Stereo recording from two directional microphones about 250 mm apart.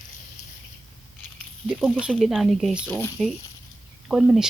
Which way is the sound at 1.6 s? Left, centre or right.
Centre.